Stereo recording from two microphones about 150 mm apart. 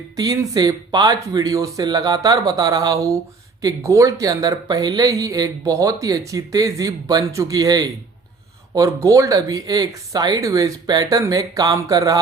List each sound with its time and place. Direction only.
0.2 s speech: 25° right (ahead or behind)